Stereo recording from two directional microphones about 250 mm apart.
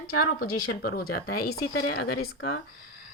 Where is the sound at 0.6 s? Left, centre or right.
Left.